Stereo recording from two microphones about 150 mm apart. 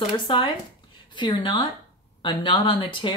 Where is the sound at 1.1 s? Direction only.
30° left (ahead or behind).